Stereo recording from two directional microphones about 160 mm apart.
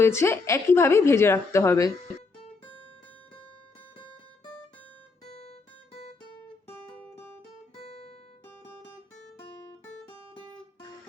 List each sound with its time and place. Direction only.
0.0 s speech: 15° left (ahead or behind)
5.3 s guitar: 40° left (ahead or behind)
7.8 s guitar: 40° left (ahead or behind)